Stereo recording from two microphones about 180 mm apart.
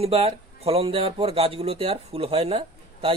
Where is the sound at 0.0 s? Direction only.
35° right (ahead or behind).